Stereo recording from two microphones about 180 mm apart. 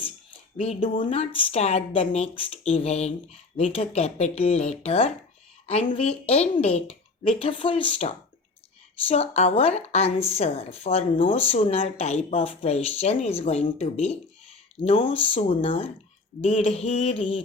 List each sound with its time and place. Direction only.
0.5 s a woman's voice: 35° left (ahead or behind)